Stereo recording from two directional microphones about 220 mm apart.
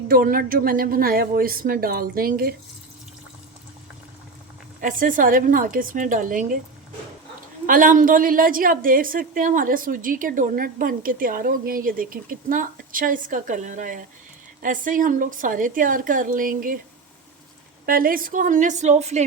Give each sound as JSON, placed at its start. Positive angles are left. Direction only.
{"t": 0.1, "sound": "a woman's voice", "side_deg": -40}
{"t": 4.8, "sound": "a woman's voice", "side_deg": -35}
{"t": 7.7, "sound": "a woman's voice", "side_deg": -40}
{"t": 17.8, "sound": "a woman's voice", "side_deg": -40}